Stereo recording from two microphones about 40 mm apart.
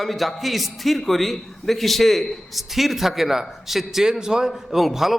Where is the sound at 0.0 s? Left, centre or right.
Centre.